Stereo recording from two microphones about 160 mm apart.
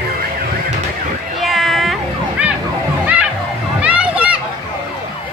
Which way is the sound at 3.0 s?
10° right (ahead or behind).